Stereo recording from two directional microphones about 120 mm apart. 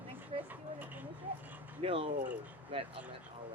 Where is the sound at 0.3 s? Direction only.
55° right (ahead or behind).